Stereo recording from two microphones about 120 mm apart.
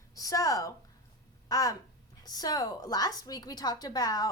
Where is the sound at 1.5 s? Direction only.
30° left (ahead or behind).